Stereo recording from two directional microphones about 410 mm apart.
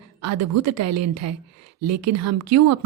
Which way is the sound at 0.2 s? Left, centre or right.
Right.